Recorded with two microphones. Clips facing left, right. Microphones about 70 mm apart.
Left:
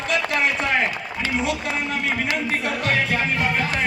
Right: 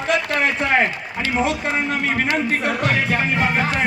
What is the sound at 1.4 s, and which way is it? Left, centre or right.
Speech, right.